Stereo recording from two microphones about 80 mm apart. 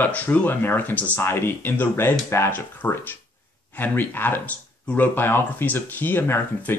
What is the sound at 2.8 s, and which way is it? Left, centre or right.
Speech, left.